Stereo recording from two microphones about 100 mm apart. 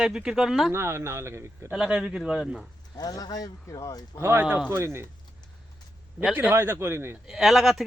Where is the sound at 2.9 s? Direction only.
40° left (ahead or behind).